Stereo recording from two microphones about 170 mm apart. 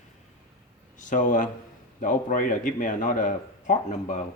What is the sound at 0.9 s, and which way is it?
A man's voice, 50° left (ahead or behind).